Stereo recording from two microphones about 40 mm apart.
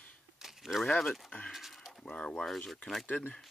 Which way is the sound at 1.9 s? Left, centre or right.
Centre.